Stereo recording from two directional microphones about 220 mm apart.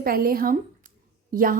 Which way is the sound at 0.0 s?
40° right (ahead or behind).